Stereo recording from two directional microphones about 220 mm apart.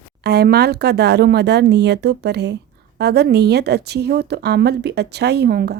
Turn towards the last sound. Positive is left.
turn(degrees=-45)  # may be behind; listen again after turning